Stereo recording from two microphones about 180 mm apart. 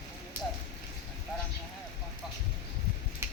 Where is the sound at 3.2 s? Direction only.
15° right (ahead or behind).